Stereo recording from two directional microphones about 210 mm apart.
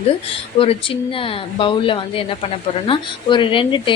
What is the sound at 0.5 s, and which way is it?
A woman's voice, 25° left (ahead or behind).